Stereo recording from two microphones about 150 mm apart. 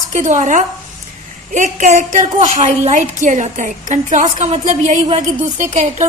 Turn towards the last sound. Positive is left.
turn(degrees=-50)  # may be behind; listen again after turning